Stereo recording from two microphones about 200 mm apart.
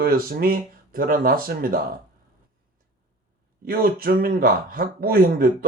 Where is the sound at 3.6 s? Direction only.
45° right (ahead or behind).